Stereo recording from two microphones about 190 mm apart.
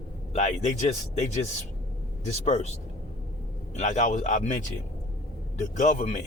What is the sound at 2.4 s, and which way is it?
Speech, 35° left (ahead or behind).